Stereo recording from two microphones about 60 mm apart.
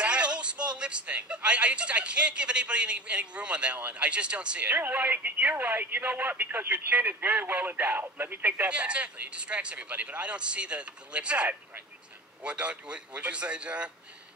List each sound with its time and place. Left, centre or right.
0.0 s speech: centre